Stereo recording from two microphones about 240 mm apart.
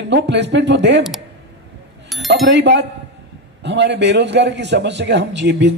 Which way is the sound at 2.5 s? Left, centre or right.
Right.